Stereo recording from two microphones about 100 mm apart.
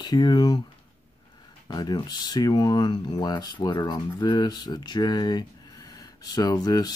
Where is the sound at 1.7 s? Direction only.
45° left (ahead or behind).